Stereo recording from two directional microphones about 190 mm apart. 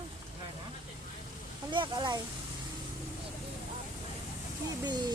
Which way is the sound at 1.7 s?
25° right (ahead or behind).